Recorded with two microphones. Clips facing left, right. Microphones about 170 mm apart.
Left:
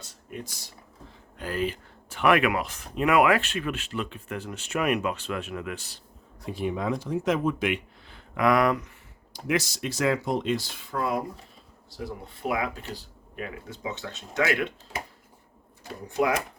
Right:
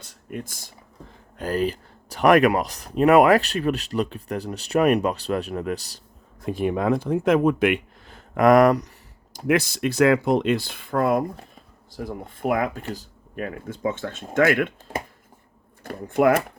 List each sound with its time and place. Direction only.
0.0 s a sound: 50° right (ahead or behind)
1.4 s speech: 40° right (ahead or behind)
6.4 s speech: 50° right (ahead or behind)
9.5 s speech: 55° right (ahead or behind)